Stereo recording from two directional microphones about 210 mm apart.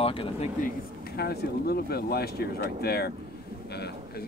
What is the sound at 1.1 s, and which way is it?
Speech, 50° left (ahead or behind).